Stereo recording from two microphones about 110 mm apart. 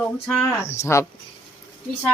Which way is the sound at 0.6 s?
25° left (ahead or behind).